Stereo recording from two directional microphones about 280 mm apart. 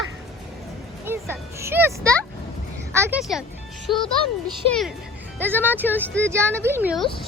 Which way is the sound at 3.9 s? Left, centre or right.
Centre.